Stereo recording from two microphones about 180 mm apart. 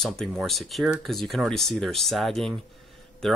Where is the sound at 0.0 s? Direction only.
5° left (ahead or behind).